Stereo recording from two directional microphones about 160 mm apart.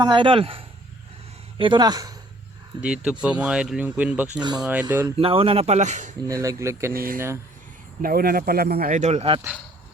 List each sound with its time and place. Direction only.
0.0 s speech: 30° right (ahead or behind)
2.8 s speech: 5° right (ahead or behind)
4.4 s speech: 25° right (ahead or behind)
4.6 s speech: 10° right (ahead or behind)
5.1 s speech: 35° right (ahead or behind)
6.2 s speech: 20° right (ahead or behind)
6.9 s speech: 65° right (ahead or behind); by 9.4 s 40° right (ahead or behind)